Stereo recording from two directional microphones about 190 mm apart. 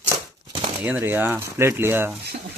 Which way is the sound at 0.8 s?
10° right (ahead or behind).